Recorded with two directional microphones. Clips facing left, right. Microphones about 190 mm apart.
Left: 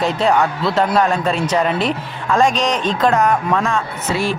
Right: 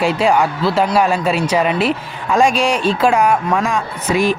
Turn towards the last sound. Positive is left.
turn(degrees=-15)  # may be behind; listen again after turning